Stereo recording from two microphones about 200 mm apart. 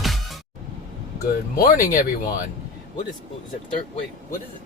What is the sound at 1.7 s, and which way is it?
Speech, 45° left (ahead or behind).